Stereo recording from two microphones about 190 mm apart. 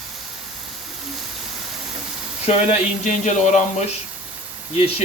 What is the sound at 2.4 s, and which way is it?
Speech, 35° left (ahead or behind).